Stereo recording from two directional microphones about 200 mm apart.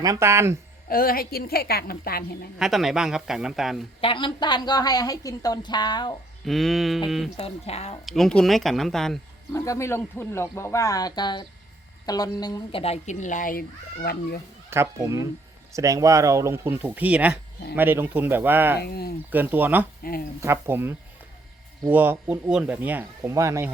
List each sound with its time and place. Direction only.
0.0 s speech: 15° right (ahead or behind)
0.9 s a woman's voice: 45° left (ahead or behind)
2.6 s speech: centre (ahead or behind)
4.0 s a woman's voice: 25° left (ahead or behind)
6.4 s speech: centre (ahead or behind)
7.3 s speech: 30° left (ahead or behind)
8.0 s speech: centre (ahead or behind)
9.5 s speech: 15° left (ahead or behind); by 14.4 s 50° left (ahead or behind)
14.7 s speech: 15° right (ahead or behind)
18.8 s a woman's voice: 50° left (ahead or behind)
19.3 s speech: 10° right (ahead or behind)
20.0 s speech: 45° left (ahead or behind)
20.4 s speech: 10° right (ahead or behind)